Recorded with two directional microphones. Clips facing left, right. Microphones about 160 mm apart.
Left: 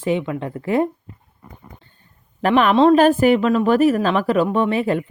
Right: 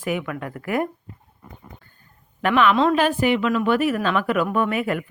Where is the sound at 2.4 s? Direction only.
35° left (ahead or behind).